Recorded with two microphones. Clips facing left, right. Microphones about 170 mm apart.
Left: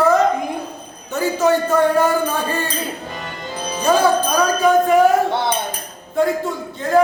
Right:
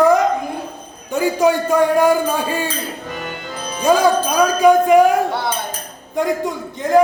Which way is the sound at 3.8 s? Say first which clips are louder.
Right 1 dB; 15° right (ahead or behind).